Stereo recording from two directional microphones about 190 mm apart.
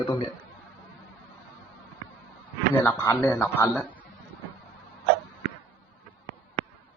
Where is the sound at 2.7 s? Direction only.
10° left (ahead or behind).